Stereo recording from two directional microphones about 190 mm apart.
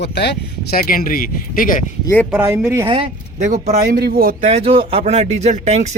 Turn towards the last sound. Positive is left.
turn(degrees=-35)  # may be behind; listen again after turning